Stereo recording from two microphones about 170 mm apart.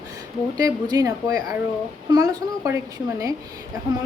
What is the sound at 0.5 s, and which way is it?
Speech, 20° right (ahead or behind).